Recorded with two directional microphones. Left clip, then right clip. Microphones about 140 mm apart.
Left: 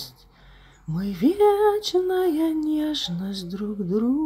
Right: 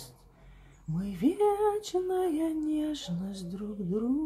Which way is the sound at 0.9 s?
30° left (ahead or behind).